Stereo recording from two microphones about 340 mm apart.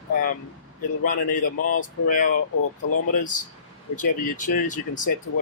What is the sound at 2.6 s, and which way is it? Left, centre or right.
Speech, left.